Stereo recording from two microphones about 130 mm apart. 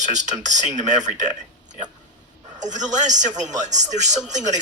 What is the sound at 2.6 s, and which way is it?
A man's voice, 70° right (ahead or behind).